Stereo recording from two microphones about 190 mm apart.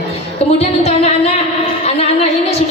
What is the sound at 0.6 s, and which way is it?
Music, 35° left (ahead or behind).